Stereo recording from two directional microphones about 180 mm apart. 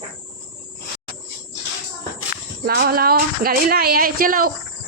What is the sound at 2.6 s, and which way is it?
A woman's voice, 60° right (ahead or behind).